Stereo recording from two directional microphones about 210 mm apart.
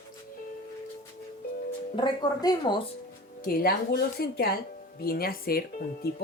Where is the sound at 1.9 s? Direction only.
20° left (ahead or behind).